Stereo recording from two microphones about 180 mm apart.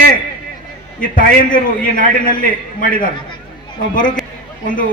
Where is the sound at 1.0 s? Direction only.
50° left (ahead or behind).